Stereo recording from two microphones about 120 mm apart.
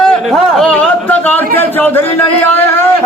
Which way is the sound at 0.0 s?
5° left (ahead or behind).